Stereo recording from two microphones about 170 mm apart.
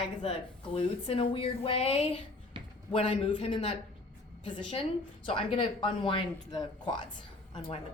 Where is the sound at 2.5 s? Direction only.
30° right (ahead or behind).